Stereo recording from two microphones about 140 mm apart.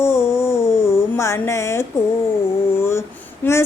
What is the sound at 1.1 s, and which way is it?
Speech, 20° left (ahead or behind).